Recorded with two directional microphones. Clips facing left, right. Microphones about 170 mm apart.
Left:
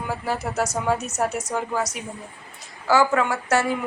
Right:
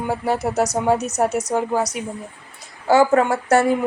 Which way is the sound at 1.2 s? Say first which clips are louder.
Right 5 dB; 25° right (ahead or behind).